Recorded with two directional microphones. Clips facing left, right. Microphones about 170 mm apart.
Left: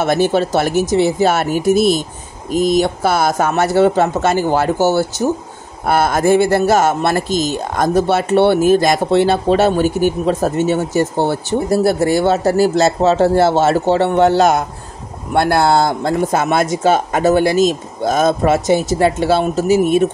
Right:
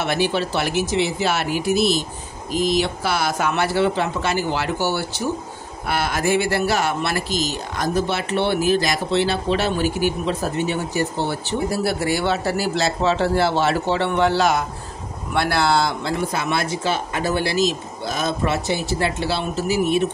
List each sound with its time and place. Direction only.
0.0 s speech: 45° left (ahead or behind)